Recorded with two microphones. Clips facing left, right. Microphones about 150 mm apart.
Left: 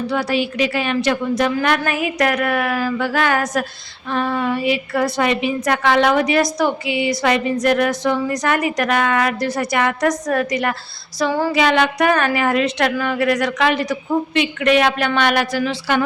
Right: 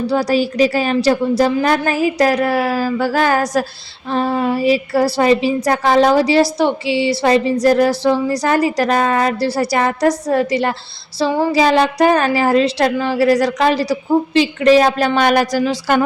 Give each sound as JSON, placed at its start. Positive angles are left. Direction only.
{"t": 0.1, "sound": "speech", "side_deg": -40}